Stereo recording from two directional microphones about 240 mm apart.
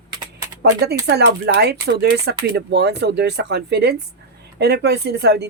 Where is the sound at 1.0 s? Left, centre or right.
Right.